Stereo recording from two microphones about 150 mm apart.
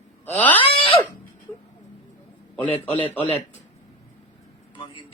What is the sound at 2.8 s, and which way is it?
Speech, 40° left (ahead or behind).